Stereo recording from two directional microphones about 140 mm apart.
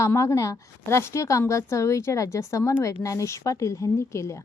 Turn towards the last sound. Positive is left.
turn(degrees=20)  # may be behind; listen again after turning